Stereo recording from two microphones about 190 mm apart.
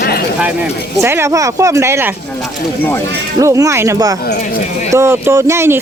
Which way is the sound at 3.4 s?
15° right (ahead or behind).